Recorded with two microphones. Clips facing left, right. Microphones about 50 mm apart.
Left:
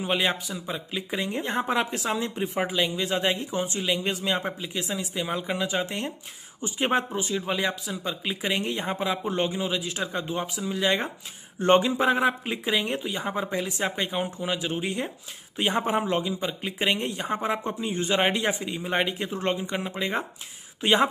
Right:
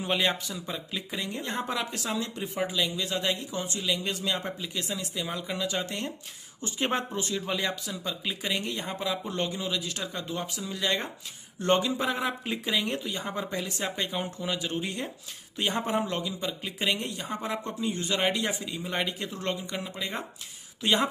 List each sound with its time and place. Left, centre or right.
0.0 s a man's voice: centre
1.1 s a man's voice: left
12.3 s a man's voice: centre